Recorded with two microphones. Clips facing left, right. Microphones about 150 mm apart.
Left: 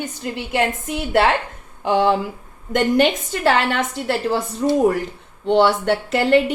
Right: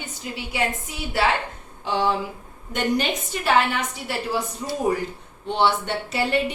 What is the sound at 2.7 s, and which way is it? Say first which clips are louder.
A woman's voice: left 7 dB; 90° left.